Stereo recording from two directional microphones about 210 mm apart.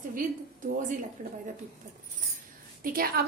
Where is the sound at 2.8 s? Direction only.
45° right (ahead or behind).